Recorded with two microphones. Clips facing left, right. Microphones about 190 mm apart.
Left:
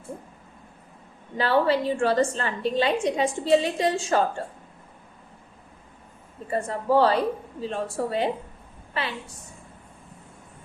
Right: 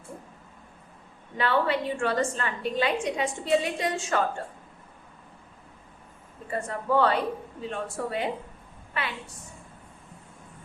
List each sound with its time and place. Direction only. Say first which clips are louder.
1.4 s a woman's voice: left 4 dB; 35° left (ahead or behind)
6.5 s a woman's voice: left 4 dB; 30° left (ahead or behind)